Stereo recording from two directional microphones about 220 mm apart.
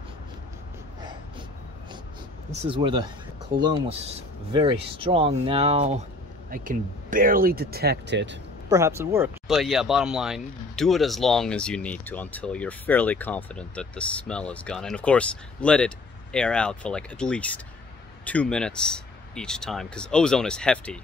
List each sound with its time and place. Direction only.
2.7 s speech: 20° right (ahead or behind); by 8.4 s 50° right (ahead or behind)
8.6 s speech: 15° right (ahead or behind); by 21.0 s 5° left (ahead or behind)